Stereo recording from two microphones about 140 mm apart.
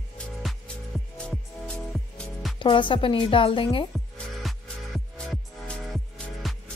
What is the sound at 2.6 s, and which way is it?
A woman's voice, 35° left (ahead or behind).